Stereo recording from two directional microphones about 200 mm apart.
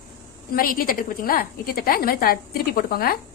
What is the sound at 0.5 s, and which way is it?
A woman's voice, 45° left (ahead or behind).